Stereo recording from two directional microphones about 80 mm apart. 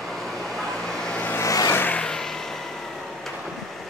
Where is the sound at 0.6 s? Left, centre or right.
Centre.